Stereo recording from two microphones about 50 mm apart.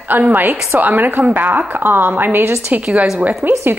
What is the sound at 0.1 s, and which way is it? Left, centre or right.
A woman's voice, right.